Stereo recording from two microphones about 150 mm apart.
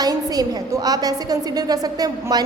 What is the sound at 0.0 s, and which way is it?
A woman's voice, 25° right (ahead or behind).